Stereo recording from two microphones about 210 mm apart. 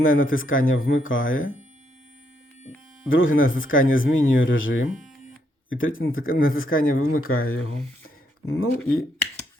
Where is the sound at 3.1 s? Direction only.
70° left (ahead or behind).